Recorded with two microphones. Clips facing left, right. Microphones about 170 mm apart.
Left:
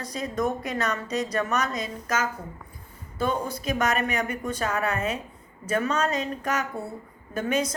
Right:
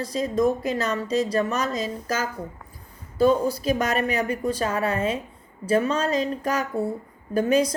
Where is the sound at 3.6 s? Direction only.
30° right (ahead or behind).